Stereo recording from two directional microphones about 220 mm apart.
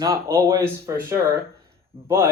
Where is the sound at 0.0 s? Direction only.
15° right (ahead or behind).